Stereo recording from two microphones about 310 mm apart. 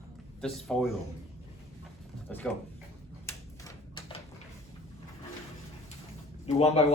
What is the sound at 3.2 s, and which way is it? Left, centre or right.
Typewriter, centre.